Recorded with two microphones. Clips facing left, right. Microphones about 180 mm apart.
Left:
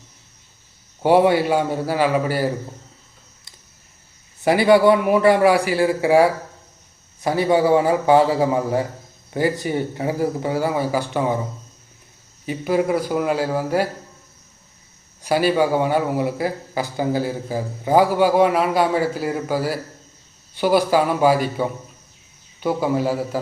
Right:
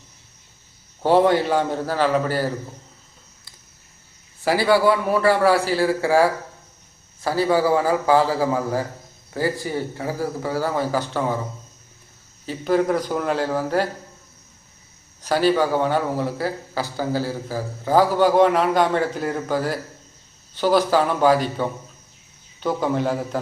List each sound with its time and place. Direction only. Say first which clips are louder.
1.0 s a man's voice: left 2 dB; 10° left (ahead or behind)
4.4 s a man's voice: left 4 dB; 20° left (ahead or behind)
12.5 s a man's voice: even; 10° left (ahead or behind)
15.2 s a man's voice: left 1 dB; 10° left (ahead or behind)